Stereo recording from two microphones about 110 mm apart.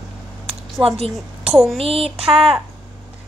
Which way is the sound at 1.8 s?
60° right (ahead or behind).